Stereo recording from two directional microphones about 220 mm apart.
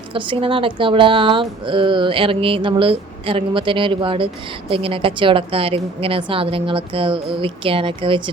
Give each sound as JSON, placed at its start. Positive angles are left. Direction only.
{"t": 0.1, "sound": "speech", "side_deg": -25}